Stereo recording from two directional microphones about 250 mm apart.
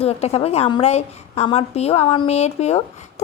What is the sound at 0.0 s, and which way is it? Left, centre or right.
A woman's voice, left.